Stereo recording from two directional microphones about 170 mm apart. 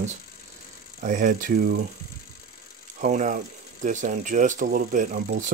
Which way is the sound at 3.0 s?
45° right (ahead or behind).